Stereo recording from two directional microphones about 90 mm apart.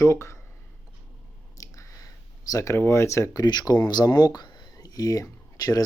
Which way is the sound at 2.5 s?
35° left (ahead or behind).